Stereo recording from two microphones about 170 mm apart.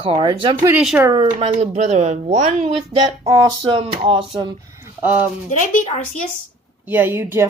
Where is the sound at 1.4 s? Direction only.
40° right (ahead or behind).